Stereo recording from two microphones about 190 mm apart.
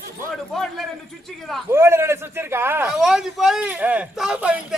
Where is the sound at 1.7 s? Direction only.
15° right (ahead or behind).